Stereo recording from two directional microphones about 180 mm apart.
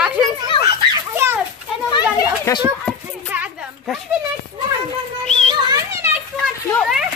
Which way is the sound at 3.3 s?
10° right (ahead or behind).